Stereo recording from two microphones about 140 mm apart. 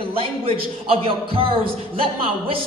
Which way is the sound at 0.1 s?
40° right (ahead or behind).